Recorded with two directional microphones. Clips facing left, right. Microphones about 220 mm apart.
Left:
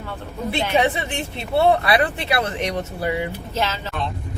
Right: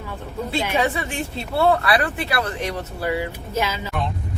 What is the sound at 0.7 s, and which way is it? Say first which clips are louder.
Speech: left 2 dB; 20° left (ahead or behind).